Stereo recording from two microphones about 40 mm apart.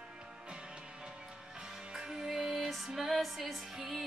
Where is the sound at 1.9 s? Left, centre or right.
Centre.